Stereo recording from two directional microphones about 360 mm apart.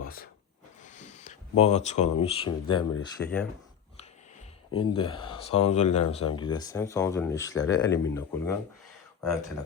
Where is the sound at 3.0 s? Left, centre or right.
Centre.